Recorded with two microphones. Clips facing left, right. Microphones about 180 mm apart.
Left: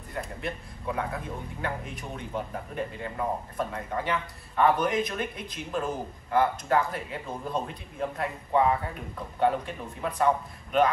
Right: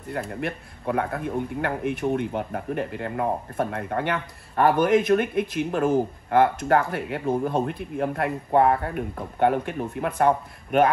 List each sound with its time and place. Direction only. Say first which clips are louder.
0.1 s a man's voice: right 5 dB; 60° right (ahead or behind)